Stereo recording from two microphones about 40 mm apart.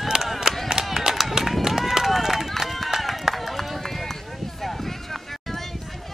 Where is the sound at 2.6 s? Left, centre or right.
Centre.